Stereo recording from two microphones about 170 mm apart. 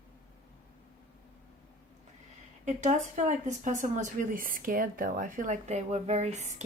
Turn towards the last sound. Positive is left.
turn(degrees=-45)  # may be behind; listen again after turning